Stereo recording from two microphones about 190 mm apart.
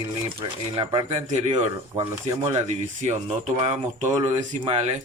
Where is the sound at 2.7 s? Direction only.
40° right (ahead or behind).